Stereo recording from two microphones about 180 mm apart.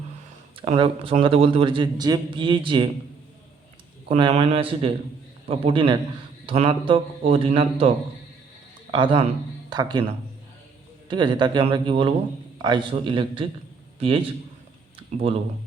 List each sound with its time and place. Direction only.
0.5 s a man's voice: 30° right (ahead or behind)
4.1 s a man's voice: 35° right (ahead or behind)
11.1 s a man's voice: 25° right (ahead or behind)
14.9 s a sound: 30° right (ahead or behind)